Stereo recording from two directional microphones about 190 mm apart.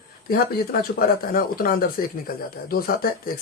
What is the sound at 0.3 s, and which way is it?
Speech, 50° left (ahead or behind).